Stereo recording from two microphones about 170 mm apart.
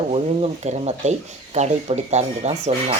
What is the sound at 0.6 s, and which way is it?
Speech, 40° right (ahead or behind).